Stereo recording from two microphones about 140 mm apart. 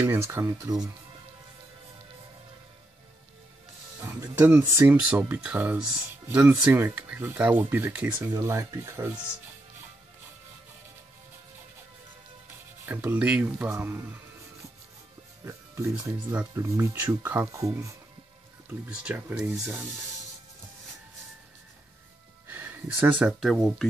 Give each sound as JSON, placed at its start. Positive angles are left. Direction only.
{"t": 0.0, "sound": "speech", "side_deg": -15}
{"t": 4.0, "sound": "speech", "side_deg": -15}
{"t": 12.8, "sound": "speech", "side_deg": -15}
{"t": 15.4, "sound": "speech", "side_deg": -20}
{"t": 18.7, "sound": "speech", "side_deg": -10}
{"t": 22.5, "sound": "speech", "side_deg": -15}